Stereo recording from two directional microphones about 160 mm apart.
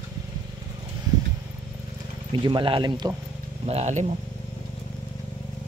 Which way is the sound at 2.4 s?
30° right (ahead or behind).